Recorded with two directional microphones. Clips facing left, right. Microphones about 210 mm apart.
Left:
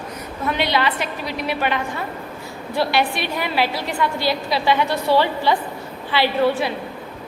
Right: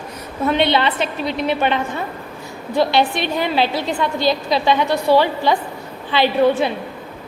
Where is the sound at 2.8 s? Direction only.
20° right (ahead or behind).